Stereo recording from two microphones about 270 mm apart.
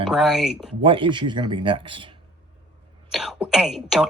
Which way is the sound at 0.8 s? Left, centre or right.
Centre.